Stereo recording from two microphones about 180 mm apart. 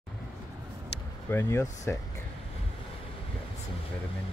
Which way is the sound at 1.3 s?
15° left (ahead or behind).